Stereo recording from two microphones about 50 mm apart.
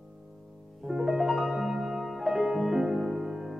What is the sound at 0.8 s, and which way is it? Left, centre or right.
Music, centre.